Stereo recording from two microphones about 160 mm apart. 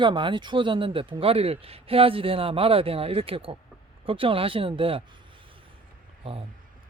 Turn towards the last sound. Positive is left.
turn(degrees=-35)  # may be behind; listen again after turning